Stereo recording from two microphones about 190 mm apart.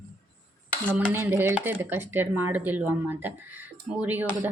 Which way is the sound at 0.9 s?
10° right (ahead or behind).